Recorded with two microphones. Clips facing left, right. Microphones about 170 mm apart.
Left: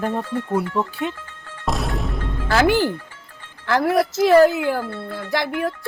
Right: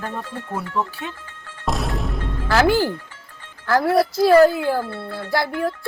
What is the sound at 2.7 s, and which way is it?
Speech, 15° left (ahead or behind).